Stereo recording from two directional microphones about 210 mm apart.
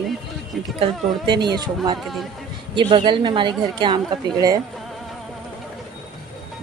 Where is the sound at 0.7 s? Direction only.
20° right (ahead or behind).